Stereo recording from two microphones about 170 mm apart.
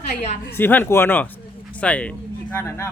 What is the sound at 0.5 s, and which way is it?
Speech, 10° left (ahead or behind).